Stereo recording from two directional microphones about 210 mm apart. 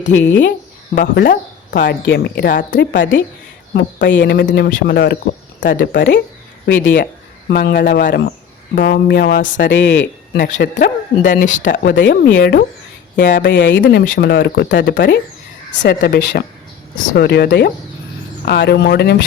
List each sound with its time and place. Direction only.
0.0 s speech: 65° left (ahead or behind)
0.9 s speech: 45° left (ahead or behind)
4.0 s speech: 55° left (ahead or behind); by 9.6 s 40° left (ahead or behind)
9.6 s speech: 60° left (ahead or behind)
11.4 s speech: 35° left (ahead or behind); by 13.8 s 55° left (ahead or behind)
13.8 s speech: 40° left (ahead or behind)